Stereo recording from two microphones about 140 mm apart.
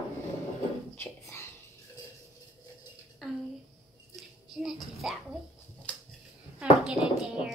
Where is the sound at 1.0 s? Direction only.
20° left (ahead or behind).